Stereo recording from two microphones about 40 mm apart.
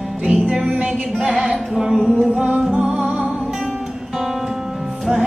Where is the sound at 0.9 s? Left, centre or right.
Centre.